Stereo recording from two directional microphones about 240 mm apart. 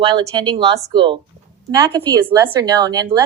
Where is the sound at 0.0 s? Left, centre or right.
Centre.